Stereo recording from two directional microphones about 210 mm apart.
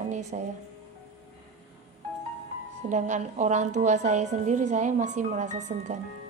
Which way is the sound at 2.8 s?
35° right (ahead or behind).